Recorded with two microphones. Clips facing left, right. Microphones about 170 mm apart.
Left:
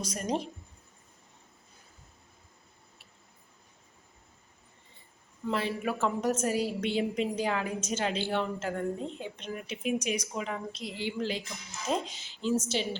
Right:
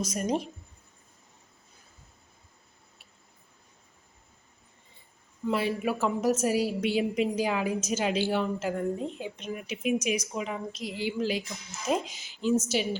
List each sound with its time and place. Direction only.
0.1 s a woman's voice: 10° right (ahead or behind)
5.5 s a woman's voice: 10° right (ahead or behind)
10.7 s a woman's voice: 30° left (ahead or behind)
10.9 s a woman's voice: 10° right (ahead or behind)